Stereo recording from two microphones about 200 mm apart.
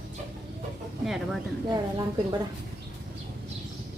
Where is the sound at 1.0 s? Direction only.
Centre (ahead or behind).